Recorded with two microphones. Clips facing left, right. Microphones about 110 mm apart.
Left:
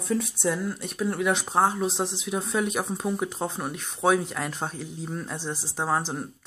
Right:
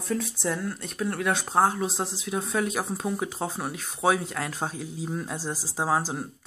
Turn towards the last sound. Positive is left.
turn(degrees=-5)  # may be behind; listen again after turning